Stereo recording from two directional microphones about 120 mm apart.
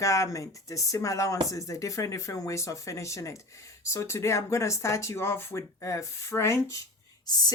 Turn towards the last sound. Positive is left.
turn(degrees=35)  # may be behind; listen again after turning